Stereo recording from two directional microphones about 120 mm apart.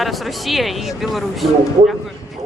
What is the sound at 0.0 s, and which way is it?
Speech, centre (ahead or behind).